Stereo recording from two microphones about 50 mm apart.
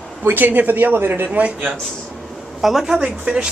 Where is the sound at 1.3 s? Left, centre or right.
Right.